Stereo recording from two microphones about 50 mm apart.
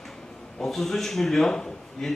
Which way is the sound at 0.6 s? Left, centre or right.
Centre.